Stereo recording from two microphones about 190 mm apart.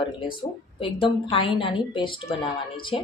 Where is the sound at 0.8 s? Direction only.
25° left (ahead or behind).